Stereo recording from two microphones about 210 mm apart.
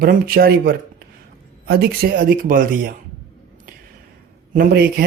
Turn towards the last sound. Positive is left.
turn(degrees=-45)  # may be behind; listen again after turning